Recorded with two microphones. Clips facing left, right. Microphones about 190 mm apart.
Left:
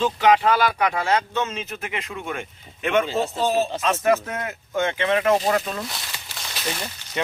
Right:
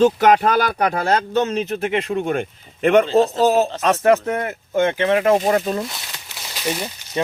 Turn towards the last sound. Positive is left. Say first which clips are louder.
# right 5 dB
turn(degrees=-15)  # may be behind; listen again after turning